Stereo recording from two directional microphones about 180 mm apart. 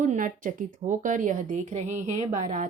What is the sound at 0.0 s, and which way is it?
Speech, 45° right (ahead or behind).